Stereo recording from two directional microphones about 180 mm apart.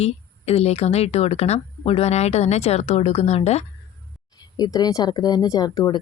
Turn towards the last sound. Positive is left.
turn(degrees=25)  # may be behind; listen again after turning